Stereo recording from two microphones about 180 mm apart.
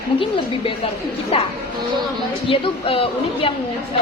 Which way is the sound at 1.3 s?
35° left (ahead or behind).